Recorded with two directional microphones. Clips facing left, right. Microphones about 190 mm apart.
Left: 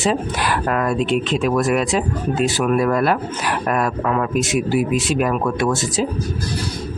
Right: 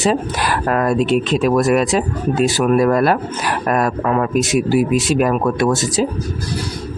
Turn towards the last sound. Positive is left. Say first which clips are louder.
# right 3 dB
turn(degrees=-40)  # may be behind; listen again after turning